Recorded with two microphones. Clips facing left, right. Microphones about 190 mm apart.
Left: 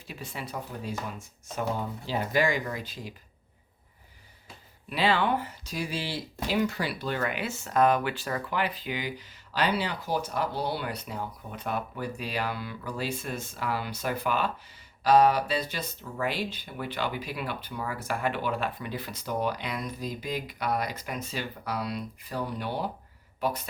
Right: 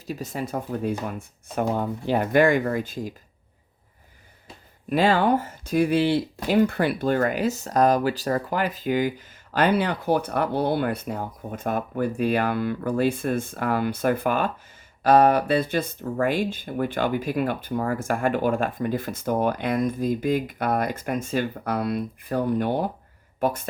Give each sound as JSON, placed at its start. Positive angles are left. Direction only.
{"t": 0.1, "sound": "speech", "side_deg": -40}
{"t": 4.9, "sound": "speech", "side_deg": -45}